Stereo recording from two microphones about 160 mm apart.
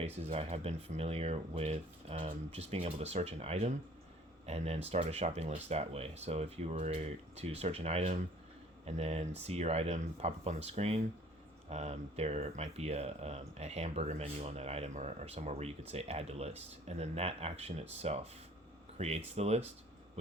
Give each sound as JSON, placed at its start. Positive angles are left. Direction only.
{"t": 0.0, "sound": "speech", "side_deg": -40}